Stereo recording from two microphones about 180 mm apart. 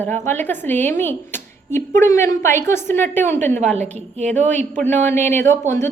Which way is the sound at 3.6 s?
40° right (ahead or behind).